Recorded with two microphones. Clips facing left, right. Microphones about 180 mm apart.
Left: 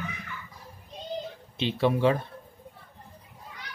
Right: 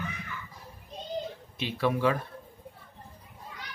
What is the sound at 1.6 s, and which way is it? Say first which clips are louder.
Speech: left 3 dB; 25° left (ahead or behind).